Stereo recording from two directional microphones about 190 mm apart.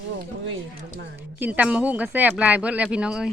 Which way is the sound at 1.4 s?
5° right (ahead or behind).